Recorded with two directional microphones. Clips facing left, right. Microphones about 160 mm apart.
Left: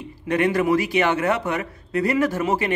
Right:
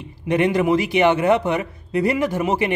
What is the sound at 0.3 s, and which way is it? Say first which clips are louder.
A man's voice: right 2 dB; 20° right (ahead or behind).